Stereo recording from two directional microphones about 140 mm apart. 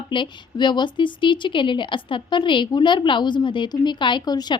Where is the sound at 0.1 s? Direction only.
35° left (ahead or behind).